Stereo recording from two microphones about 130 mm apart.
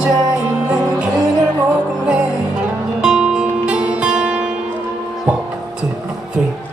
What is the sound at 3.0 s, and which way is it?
Music, 5° right (ahead or behind).